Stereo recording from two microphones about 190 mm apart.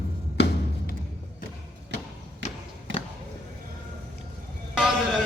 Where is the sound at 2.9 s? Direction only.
80° right.